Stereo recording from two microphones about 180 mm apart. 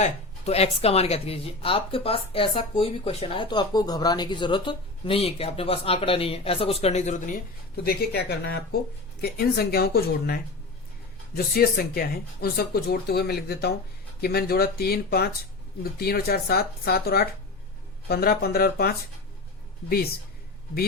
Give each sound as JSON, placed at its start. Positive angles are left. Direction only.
{"t": 0.0, "sound": "speech", "side_deg": 35}
{"t": 7.9, "sound": "speech", "side_deg": 60}